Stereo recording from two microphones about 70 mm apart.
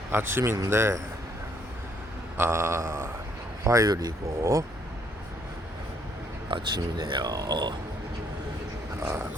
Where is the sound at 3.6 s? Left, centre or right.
Right.